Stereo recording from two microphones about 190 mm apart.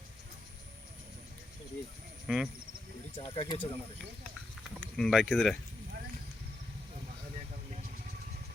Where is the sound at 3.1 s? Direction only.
30° left (ahead or behind).